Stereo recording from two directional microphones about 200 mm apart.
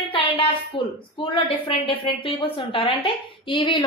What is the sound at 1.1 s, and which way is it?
A woman's voice, 25° left (ahead or behind).